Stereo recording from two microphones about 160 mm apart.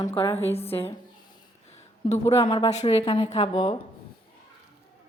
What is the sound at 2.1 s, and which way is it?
Speech, 40° left (ahead or behind).